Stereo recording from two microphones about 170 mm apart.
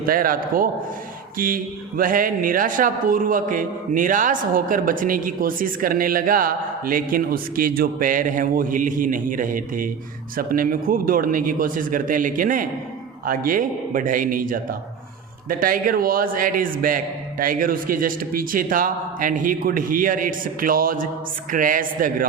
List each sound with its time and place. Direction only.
0.0 s a man's voice: 60° right (ahead or behind)